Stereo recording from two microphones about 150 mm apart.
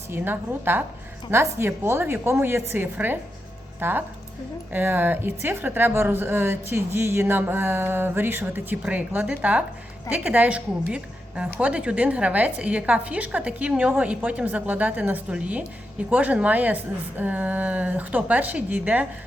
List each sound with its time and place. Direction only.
0.1 s a woman's voice: 15° right (ahead or behind)